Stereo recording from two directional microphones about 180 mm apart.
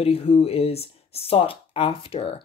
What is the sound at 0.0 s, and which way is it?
Speech, 35° left (ahead or behind).